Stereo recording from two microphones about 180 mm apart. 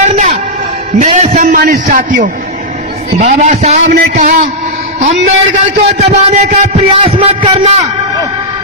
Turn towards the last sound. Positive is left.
turn(degrees=-30)  # may be behind; listen again after turning